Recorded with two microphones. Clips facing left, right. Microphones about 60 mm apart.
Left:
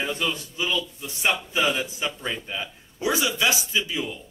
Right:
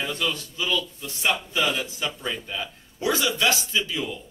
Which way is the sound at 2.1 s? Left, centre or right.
Centre.